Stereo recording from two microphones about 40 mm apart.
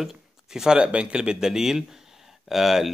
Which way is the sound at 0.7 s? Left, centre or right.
Right.